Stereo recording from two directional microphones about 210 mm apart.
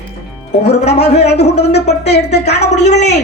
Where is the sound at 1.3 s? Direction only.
50° left (ahead or behind).